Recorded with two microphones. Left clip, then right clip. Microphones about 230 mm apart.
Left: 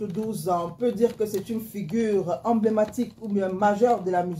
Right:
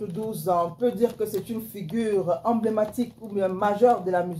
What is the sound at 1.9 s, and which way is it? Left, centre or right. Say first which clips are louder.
Speech: even; left.